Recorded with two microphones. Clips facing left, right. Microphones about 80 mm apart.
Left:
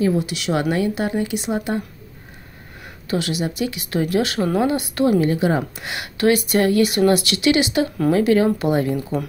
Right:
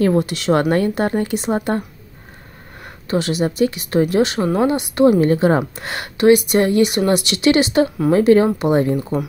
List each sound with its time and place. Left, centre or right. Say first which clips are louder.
0.0 s speech: right 3 dB; right
2.8 s speech: right 3 dB; right
5.2 s speech: right 4 dB; right
6.1 s speech: right 5 dB; right